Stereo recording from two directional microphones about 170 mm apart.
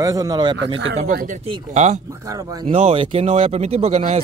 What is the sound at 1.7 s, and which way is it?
Speech, 45° right (ahead or behind).